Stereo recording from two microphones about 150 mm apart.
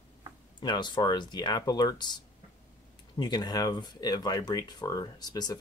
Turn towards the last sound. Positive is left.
turn(degrees=25)  # may be behind; listen again after turning